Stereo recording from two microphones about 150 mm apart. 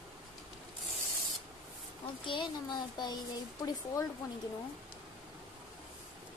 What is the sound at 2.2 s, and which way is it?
Speech, 30° left (ahead or behind).